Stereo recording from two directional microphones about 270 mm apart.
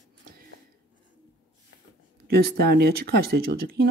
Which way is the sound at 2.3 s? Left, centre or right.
Right.